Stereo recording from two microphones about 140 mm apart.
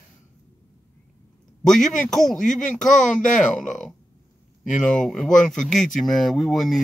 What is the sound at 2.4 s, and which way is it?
Speech, 65° left (ahead or behind).